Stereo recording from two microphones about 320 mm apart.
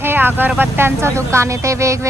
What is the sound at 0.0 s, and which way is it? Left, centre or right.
Speech, centre.